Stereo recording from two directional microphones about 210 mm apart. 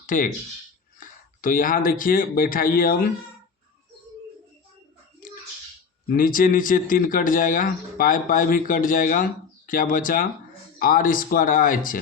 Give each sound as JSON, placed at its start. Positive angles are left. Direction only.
{"t": 0.0, "sound": "speech", "side_deg": 40}
{"t": 6.1, "sound": "speech", "side_deg": 40}